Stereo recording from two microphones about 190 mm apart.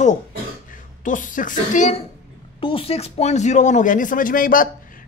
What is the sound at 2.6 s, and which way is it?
Speech, 30° left (ahead or behind).